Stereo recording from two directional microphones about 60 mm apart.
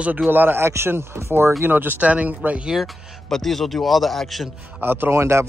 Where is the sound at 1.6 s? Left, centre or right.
Right.